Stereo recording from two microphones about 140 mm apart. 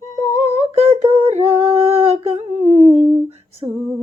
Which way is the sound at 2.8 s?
55° left (ahead or behind).